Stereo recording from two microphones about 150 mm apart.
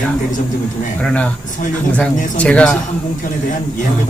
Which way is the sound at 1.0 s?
5° left (ahead or behind).